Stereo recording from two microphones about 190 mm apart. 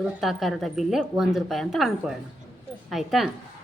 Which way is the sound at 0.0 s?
Centre (ahead or behind).